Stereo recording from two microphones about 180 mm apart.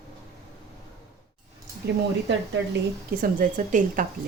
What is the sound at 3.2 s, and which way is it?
Speech, 50° right (ahead or behind).